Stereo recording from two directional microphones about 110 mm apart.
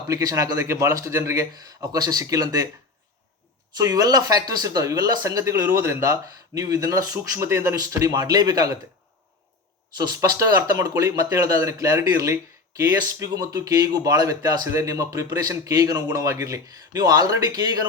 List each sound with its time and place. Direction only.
0.1 s speech: 35° right (ahead or behind)
3.8 s speech: 35° right (ahead or behind)
10.0 s speech: 30° right (ahead or behind)